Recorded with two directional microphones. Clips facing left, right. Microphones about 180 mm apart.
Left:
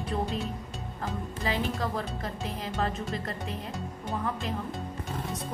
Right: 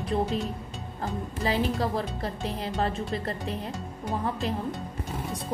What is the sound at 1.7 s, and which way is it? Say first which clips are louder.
Speech: right 3 dB; 35° right (ahead or behind).